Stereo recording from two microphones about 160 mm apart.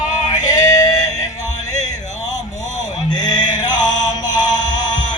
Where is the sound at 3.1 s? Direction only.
25° left (ahead or behind).